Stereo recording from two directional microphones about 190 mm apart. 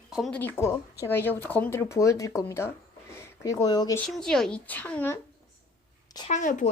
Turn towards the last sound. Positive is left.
turn(degrees=40)  # may be behind; listen again after turning